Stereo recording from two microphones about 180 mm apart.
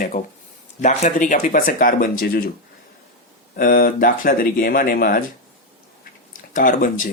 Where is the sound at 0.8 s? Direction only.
40° left (ahead or behind).